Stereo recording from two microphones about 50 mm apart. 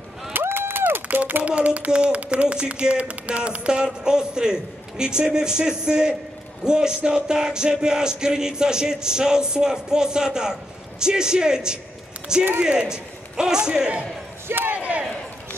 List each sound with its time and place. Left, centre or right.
0.3 s a sound: right
1.4 s child singing: right
1.9 s music: right
14.7 s battle cry: right